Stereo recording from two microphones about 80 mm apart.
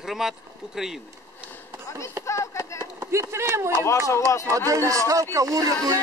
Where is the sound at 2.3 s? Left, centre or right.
Left.